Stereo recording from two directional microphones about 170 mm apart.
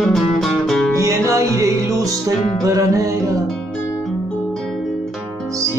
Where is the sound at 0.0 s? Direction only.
Centre (ahead or behind).